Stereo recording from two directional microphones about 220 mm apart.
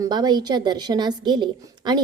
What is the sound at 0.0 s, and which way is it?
A woman's voice, 20° right (ahead or behind).